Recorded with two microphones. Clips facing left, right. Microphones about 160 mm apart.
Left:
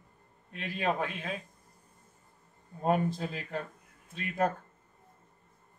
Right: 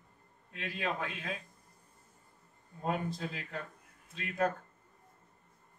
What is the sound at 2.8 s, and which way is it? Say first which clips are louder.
Speech: left 6 dB; 50° left (ahead or behind).